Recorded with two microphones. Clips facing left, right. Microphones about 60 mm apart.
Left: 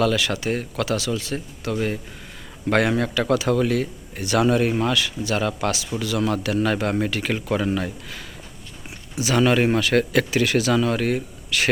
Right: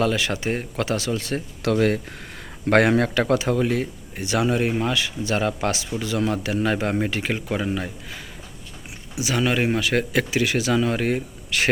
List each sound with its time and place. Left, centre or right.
0.0 s speech: right
1.7 s speech: right
2.6 s speech: right
3.3 s speech: right